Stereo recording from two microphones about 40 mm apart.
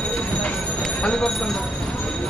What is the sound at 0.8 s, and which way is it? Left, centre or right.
Speech, centre.